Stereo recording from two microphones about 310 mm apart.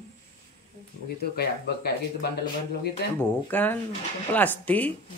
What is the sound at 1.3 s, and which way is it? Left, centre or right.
Speech, left.